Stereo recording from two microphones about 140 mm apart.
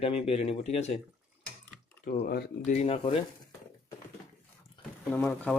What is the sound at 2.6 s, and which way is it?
Speech, 50° left (ahead or behind).